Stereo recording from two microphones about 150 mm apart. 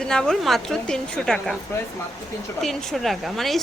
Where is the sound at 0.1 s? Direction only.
5° left (ahead or behind).